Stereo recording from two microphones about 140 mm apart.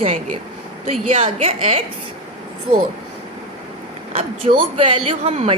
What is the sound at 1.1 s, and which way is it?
Speech, 45° right (ahead or behind).